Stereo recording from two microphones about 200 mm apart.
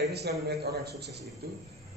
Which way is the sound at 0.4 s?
55° right (ahead or behind).